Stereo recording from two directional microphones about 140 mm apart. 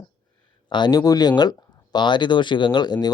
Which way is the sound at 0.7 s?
30° left (ahead or behind).